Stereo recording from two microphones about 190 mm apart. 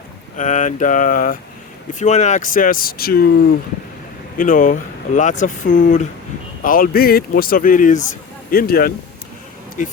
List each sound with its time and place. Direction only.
0.3 s speech: 40° left (ahead or behind)
4.4 s speech: 45° left (ahead or behind)